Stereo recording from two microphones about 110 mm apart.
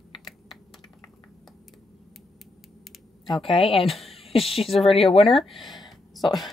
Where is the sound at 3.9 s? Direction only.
Centre (ahead or behind).